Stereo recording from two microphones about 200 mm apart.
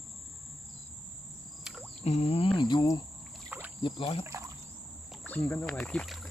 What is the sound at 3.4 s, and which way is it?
Rowboat, 10° right (ahead or behind).